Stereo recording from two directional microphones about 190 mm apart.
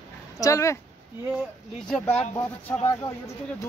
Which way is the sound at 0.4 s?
15° left (ahead or behind).